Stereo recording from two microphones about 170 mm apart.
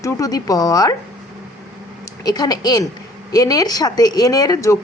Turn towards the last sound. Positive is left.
turn(degrees=20)  # may be behind; listen again after turning